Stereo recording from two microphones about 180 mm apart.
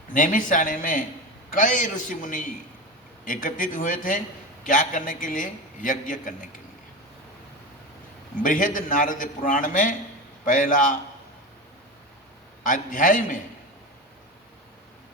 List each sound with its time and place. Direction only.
0.1 s a man's voice: 45° left (ahead or behind)
8.4 s a man's voice: 45° left (ahead or behind)
12.6 s a man's voice: 45° left (ahead or behind)